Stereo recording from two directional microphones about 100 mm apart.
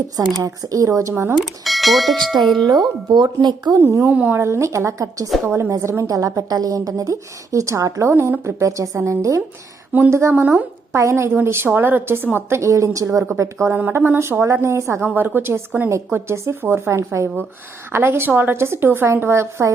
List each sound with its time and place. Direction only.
0.4 s a woman's voice: 35° right (ahead or behind)
1.4 s speech: centre (ahead or behind)
3.1 s speech: 45° right (ahead or behind)
3.8 s a woman's voice: 25° right (ahead or behind)
4.4 s a woman's voice: 25° right (ahead or behind)
10.4 s a woman's voice: 15° right (ahead or behind)
10.9 s a woman's voice: 25° right (ahead or behind)